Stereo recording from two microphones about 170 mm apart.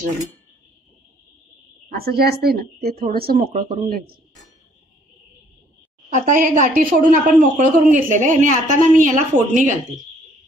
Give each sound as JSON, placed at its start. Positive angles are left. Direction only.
{"t": 1.9, "sound": "speech", "side_deg": -65}
{"t": 6.1, "sound": "a woman's voice", "side_deg": -50}